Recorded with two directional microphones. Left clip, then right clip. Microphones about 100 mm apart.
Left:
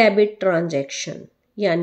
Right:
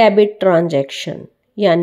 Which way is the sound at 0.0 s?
40° right (ahead or behind).